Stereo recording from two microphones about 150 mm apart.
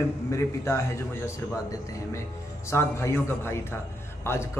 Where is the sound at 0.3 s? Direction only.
20° left (ahead or behind).